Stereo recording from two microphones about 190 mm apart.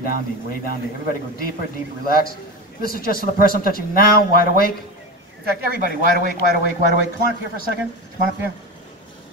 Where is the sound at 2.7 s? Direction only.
50° left (ahead or behind).